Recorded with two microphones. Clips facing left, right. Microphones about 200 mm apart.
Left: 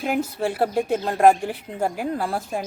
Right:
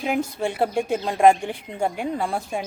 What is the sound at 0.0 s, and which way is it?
A woman's voice, centre (ahead or behind).